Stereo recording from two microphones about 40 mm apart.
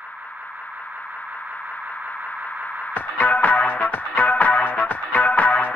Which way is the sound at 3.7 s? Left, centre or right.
Left.